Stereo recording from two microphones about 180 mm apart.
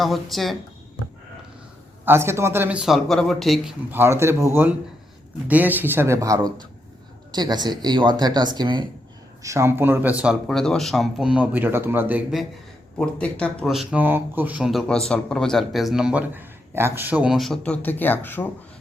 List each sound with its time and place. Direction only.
0.0 s speech: centre (ahead or behind)
2.0 s speech: 15° right (ahead or behind)
3.9 s speech: 15° right (ahead or behind)
10.4 s speech: 5° left (ahead or behind)
13.0 s speech: 5° left (ahead or behind)